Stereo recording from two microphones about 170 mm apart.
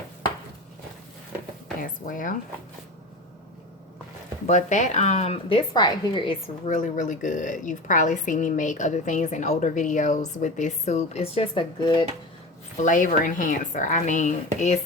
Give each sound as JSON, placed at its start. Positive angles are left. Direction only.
{"t": 1.8, "sound": "a woman's voice", "side_deg": 50}
{"t": 4.4, "sound": "a woman's voice", "side_deg": 45}
{"t": 6.7, "sound": "a woman's voice", "side_deg": 50}
{"t": 12.7, "sound": "a woman's voice", "side_deg": 50}